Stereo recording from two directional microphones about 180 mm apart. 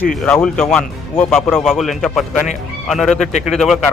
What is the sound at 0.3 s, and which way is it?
Speech, 10° left (ahead or behind).